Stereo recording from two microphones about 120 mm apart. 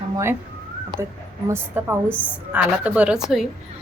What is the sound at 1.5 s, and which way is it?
A woman's voice, 20° right (ahead or behind).